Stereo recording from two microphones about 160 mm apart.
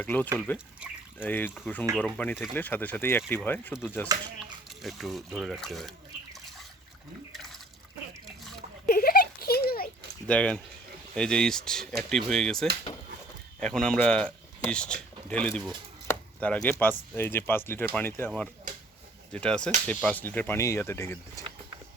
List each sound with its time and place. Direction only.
0.0 s speech: 10° left (ahead or behind)
4.8 s speech: centre (ahead or behind)
8.9 s a sound: 65° left (ahead or behind)
10.2 s speech: 10° left (ahead or behind)
16.0 s chopping: 10° left (ahead or behind)
17.2 s speech: 15° left (ahead or behind)
19.3 s speech: 5° left (ahead or behind)